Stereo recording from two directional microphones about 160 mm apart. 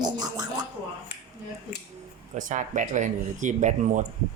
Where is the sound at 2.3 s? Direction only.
50° right (ahead or behind).